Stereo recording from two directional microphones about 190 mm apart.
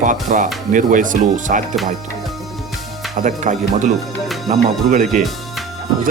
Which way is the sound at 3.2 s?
40° right (ahead or behind).